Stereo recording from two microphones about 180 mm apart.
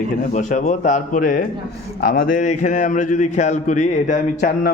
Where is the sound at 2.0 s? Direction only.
55° left (ahead or behind).